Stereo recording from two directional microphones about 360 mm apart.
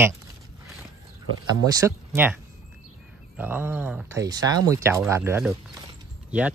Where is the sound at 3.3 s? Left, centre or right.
Centre.